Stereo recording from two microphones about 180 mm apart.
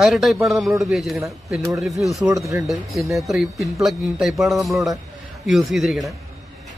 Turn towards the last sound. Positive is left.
turn(degrees=0)  # may be behind; listen again after turning